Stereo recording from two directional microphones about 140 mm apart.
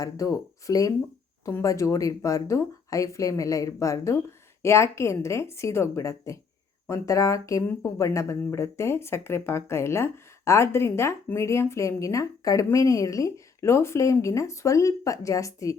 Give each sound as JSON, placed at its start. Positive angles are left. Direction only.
{"t": 0.0, "sound": "speech", "side_deg": 25}